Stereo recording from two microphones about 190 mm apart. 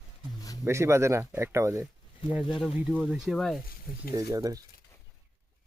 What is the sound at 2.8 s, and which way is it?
Speech, centre (ahead or behind).